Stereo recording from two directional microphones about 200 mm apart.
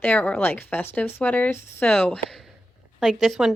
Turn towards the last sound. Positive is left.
turn(degrees=0)  # may be behind; listen again after turning